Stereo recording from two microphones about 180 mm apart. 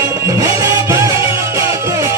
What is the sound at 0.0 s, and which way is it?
Music, 20° right (ahead or behind).